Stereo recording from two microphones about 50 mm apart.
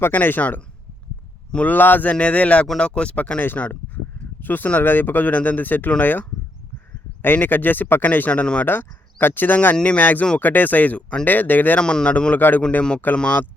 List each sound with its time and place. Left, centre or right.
0.1 s speech: left
1.6 s speech: left
3.6 s speech: left
8.3 s speech: left
8.6 s speech: left
11.8 s speech: centre
12.4 s speech: left
13.1 s speech: centre